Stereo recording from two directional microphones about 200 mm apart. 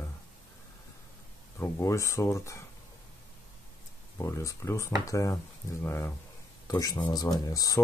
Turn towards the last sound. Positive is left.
turn(degrees=20)  # may be behind; listen again after turning